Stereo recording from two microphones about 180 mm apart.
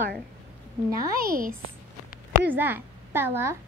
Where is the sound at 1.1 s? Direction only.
55° right (ahead or behind).